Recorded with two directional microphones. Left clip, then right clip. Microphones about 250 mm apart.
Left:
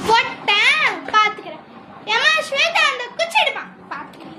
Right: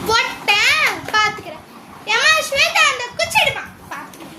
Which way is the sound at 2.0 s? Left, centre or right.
Centre.